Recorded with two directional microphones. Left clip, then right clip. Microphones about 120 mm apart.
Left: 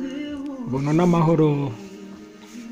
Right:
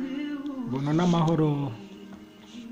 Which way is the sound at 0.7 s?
30° left (ahead or behind).